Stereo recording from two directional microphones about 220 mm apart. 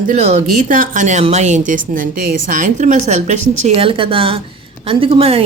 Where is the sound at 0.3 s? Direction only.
30° right (ahead or behind).